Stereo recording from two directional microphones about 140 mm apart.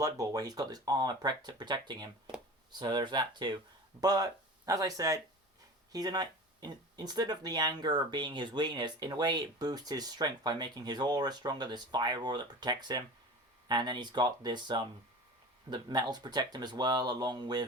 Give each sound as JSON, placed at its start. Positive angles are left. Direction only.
{"t": 0.0, "sound": "speech", "side_deg": -25}